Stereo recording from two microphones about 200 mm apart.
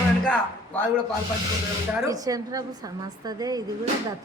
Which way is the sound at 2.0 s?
15° right (ahead or behind).